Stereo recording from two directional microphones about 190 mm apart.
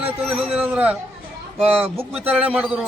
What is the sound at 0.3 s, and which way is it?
A man's voice, 5° right (ahead or behind).